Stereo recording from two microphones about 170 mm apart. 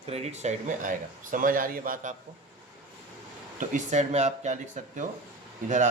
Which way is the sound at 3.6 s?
45° right (ahead or behind).